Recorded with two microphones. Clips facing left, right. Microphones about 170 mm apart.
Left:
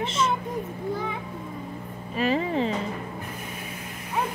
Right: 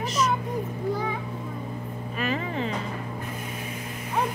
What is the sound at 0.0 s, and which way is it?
Speech, 25° left (ahead or behind).